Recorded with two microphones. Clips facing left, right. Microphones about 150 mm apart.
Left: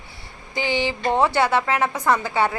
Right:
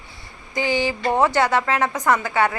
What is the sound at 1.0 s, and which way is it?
Speech, 10° right (ahead or behind).